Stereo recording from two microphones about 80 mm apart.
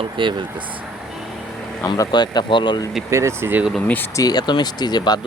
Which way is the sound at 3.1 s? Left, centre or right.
Right.